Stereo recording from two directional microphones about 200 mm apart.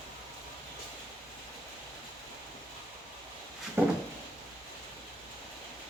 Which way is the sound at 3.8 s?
10° right (ahead or behind).